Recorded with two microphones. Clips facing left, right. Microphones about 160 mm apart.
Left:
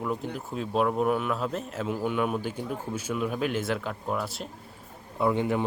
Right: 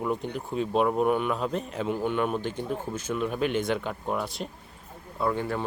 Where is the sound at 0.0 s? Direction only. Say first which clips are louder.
Right 2 dB; centre (ahead or behind).